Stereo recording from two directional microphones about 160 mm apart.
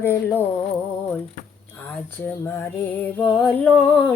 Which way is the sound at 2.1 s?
15° left (ahead or behind).